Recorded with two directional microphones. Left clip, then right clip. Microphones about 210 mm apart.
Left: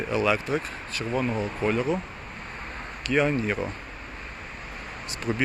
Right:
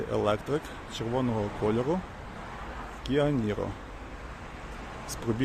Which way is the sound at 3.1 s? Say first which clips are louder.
Left 4 dB; centre (ahead or behind).